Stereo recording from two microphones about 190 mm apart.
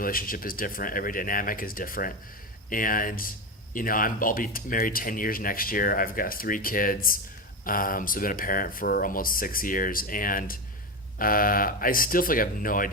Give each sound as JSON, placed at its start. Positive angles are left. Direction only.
{"t": 0.0, "sound": "speech", "side_deg": 50}